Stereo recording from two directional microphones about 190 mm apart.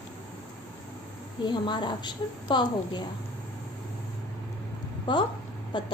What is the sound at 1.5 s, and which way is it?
A woman's voice, 25° left (ahead or behind).